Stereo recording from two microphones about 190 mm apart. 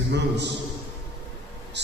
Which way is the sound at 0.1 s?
65° right (ahead or behind).